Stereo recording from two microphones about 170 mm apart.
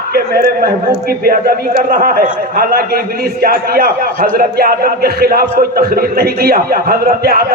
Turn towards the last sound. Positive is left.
turn(degrees=-60)  # may be behind; listen again after turning